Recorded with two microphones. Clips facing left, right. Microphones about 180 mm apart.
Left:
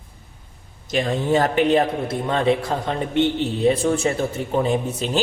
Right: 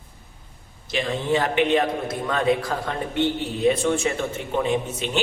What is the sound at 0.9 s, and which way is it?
A man's voice, 40° left (ahead or behind).